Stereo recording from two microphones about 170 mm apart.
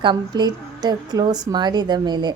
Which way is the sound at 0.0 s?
25° right (ahead or behind).